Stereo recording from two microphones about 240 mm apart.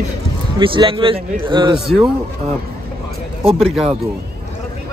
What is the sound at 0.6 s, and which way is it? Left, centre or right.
A man's voice, right.